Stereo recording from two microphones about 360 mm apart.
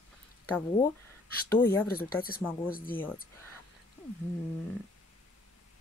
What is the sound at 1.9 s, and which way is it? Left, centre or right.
Speech, left.